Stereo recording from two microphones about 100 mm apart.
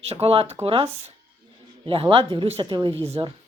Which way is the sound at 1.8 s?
60° right (ahead or behind).